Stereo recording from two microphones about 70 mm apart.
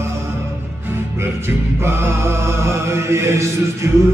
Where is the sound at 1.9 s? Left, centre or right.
Right.